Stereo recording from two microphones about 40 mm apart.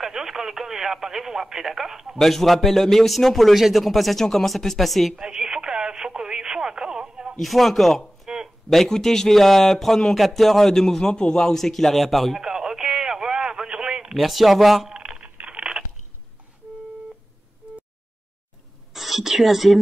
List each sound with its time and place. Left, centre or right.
0.0 s speech: centre
2.1 s a man's voice: centre
5.2 s radio: centre
7.3 s a man's voice: centre
12.4 s radio: centre
14.1 s a man's voice: centre
14.9 s a sound: right
18.9 s speech: centre